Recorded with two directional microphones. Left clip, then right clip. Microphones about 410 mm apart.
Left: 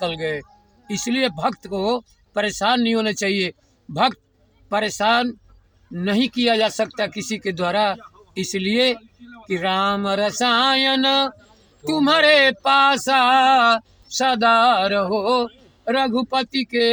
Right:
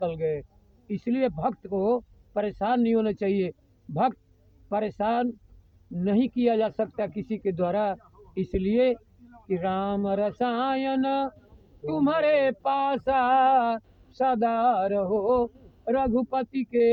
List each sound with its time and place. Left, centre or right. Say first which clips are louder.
0.0 s male singing: left 4 dB; right
4.7 s male singing: left 8 dB; right